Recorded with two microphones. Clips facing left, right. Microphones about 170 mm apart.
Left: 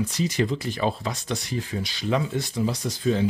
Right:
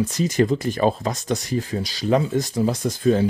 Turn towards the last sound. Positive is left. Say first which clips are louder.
# right 5 dB
turn(degrees=-50)  # may be behind; listen again after turning